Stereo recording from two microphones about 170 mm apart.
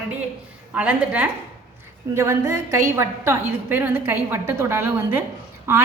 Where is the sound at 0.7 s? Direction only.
10° right (ahead or behind).